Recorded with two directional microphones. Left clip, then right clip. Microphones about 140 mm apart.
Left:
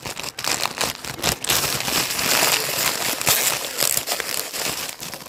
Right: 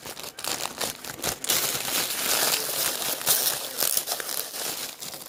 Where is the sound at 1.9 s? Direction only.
20° left (ahead or behind).